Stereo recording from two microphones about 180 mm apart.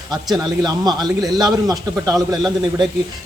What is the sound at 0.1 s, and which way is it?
A man's voice, 20° right (ahead or behind).